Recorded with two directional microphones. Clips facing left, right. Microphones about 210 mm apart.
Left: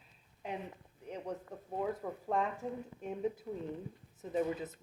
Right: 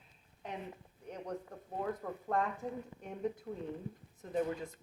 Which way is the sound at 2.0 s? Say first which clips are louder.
Left 1 dB; 10° left (ahead or behind).